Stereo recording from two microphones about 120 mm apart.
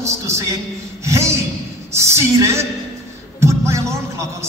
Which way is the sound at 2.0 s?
25° right (ahead or behind).